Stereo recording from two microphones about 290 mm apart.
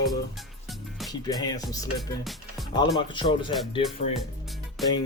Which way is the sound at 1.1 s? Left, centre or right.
Centre.